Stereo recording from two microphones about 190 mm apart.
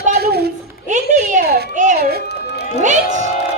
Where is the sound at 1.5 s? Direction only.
55° right (ahead or behind).